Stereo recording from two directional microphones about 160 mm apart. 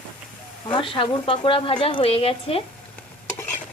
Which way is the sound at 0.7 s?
35° left (ahead or behind).